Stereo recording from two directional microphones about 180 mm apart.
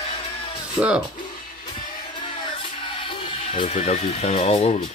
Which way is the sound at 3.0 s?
30° left (ahead or behind).